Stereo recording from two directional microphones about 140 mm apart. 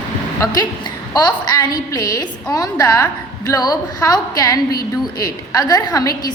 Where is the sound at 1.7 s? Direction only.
25° left (ahead or behind).